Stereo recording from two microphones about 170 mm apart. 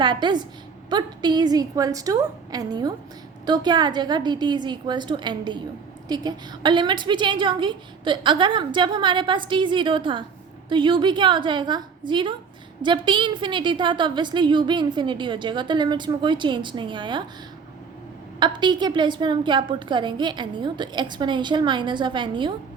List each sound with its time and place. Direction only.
0.0 s a woman's voice: 25° right (ahead or behind)
18.3 s a woman's voice: 25° right (ahead or behind)